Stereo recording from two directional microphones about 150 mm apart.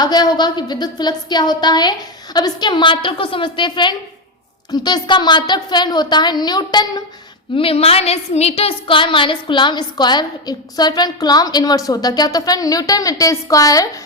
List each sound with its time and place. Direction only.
0.0 s a woman's voice: 25° left (ahead or behind)
7.5 s a woman's voice: 40° left (ahead or behind); by 13.8 s 25° left (ahead or behind)